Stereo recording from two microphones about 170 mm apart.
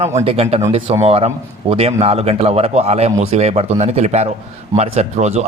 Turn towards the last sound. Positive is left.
turn(degrees=-40)  # may be behind; listen again after turning